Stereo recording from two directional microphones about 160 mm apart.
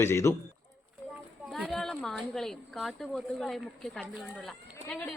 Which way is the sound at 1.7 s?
5° left (ahead or behind).